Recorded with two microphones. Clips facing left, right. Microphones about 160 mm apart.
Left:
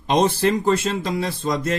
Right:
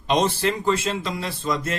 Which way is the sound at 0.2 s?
40° left (ahead or behind).